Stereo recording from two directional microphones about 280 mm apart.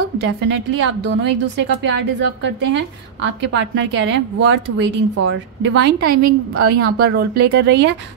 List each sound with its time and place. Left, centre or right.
0.2 s a woman's voice: right